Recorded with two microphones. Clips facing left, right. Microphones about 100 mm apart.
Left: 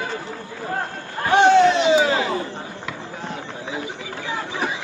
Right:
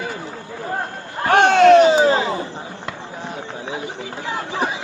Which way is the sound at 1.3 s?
65° right (ahead or behind).